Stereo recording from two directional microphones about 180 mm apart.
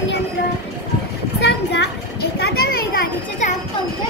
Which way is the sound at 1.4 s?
70° left (ahead or behind).